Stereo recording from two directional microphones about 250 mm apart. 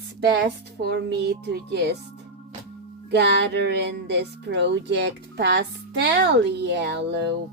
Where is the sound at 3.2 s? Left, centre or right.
Right.